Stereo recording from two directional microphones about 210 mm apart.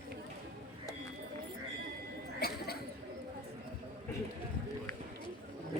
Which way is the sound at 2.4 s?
50° left (ahead or behind).